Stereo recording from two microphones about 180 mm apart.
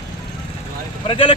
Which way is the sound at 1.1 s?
30° left (ahead or behind).